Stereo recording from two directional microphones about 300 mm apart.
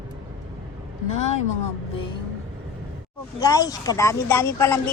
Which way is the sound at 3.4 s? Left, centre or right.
Centre.